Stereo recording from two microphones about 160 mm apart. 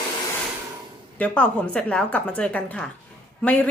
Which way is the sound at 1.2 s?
10° left (ahead or behind).